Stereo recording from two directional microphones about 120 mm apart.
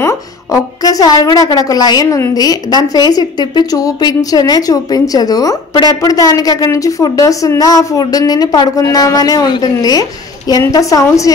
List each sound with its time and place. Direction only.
0.0 s a woman's voice: 30° left (ahead or behind)